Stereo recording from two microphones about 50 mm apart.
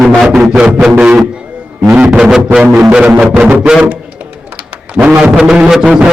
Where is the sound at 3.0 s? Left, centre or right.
Right.